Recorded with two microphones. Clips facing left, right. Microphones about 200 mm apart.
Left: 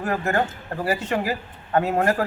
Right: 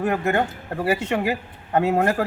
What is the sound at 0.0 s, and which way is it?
A man's voice, 20° right (ahead or behind).